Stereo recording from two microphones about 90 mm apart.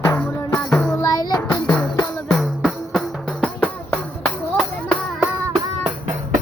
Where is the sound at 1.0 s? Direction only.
45° left (ahead or behind).